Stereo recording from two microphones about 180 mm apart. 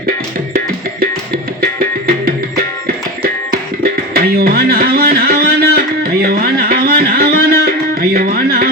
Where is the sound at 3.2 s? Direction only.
55° right (ahead or behind).